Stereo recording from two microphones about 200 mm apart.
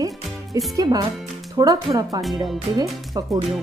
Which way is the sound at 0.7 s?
15° right (ahead or behind).